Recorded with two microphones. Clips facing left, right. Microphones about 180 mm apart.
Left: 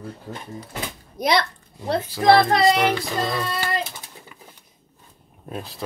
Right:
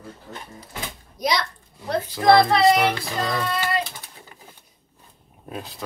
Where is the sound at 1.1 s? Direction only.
55° left (ahead or behind).